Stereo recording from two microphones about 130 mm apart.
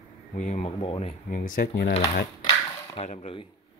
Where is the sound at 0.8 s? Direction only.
50° left (ahead or behind).